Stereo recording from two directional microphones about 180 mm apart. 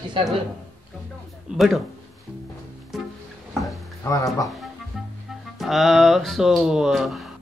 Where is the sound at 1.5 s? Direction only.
Centre (ahead or behind).